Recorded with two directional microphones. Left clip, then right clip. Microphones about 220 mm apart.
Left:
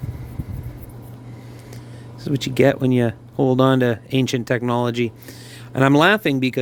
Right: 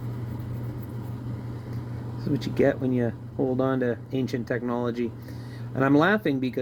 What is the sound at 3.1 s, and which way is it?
Speech, 70° left (ahead or behind).